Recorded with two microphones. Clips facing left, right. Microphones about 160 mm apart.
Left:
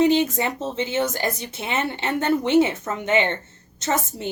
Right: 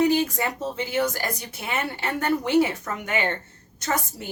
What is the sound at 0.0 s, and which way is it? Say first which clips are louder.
A woman's voice: left 3 dB; 25° left (ahead or behind).